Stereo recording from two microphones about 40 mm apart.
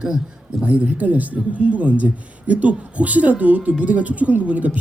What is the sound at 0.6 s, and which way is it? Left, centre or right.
Speech, right.